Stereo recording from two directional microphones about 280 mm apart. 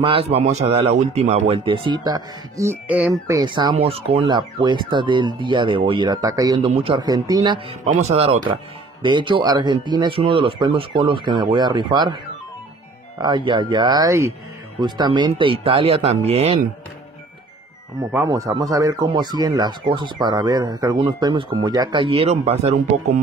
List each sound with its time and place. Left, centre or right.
0.0 s speech: centre
13.2 s speech: centre
18.1 s speech: centre